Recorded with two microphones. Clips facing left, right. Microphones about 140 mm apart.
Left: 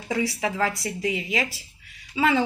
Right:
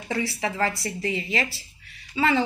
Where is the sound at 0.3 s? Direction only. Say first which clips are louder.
Left 1 dB; 5° left (ahead or behind).